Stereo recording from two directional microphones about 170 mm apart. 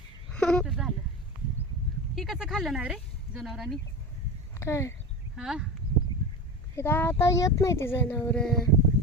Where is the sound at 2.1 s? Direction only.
Centre (ahead or behind).